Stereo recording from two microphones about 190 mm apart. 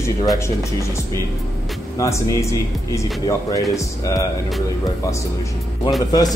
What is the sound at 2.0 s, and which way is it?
Speech, 15° left (ahead or behind).